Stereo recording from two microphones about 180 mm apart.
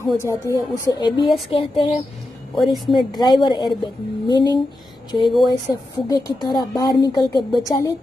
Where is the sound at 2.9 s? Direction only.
25° left (ahead or behind).